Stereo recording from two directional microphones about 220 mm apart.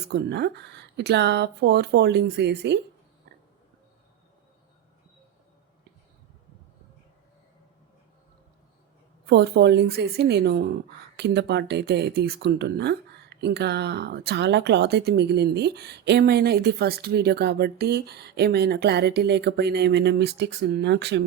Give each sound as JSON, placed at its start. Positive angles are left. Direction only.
{"t": 0.1, "sound": "speech", "side_deg": -50}
{"t": 9.2, "sound": "speech", "side_deg": -50}